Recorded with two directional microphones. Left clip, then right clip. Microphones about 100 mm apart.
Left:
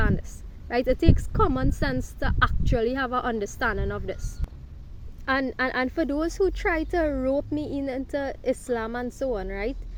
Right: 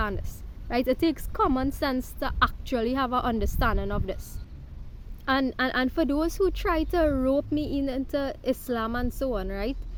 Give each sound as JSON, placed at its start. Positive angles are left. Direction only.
{"t": 0.0, "sound": "speech", "side_deg": -20}
{"t": 5.2, "sound": "speech", "side_deg": -25}